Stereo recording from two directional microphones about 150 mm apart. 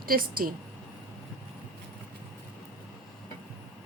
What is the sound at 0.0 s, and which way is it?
Speech, 75° right (ahead or behind).